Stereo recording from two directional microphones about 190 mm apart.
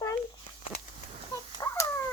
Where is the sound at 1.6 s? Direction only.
15° left (ahead or behind).